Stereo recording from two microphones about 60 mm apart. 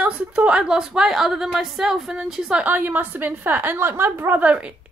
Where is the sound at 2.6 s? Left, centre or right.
Right.